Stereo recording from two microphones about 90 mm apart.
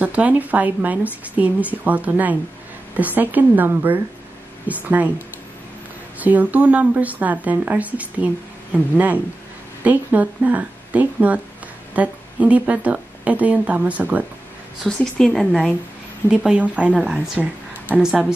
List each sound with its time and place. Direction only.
0.0 s a woman's voice: 15° right (ahead or behind)
6.1 s a woman's voice: 20° right (ahead or behind)
14.8 s a woman's voice: 5° left (ahead or behind)
16.3 s a woman's voice: 10° right (ahead or behind)